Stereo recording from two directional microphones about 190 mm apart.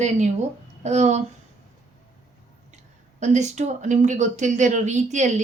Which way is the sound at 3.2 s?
40° right (ahead or behind).